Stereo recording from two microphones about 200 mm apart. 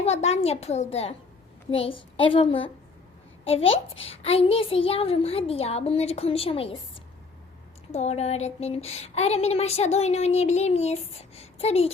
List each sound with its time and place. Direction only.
0.0 s a woman's voice: 30° left (ahead or behind)
7.9 s speech: 30° left (ahead or behind)